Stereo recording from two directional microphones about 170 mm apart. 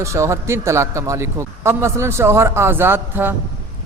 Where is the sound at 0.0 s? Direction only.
15° right (ahead or behind).